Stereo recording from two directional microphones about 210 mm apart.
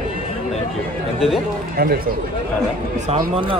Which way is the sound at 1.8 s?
45° right (ahead or behind).